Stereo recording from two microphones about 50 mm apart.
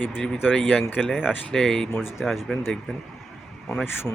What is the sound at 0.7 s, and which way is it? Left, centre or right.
Speech, centre.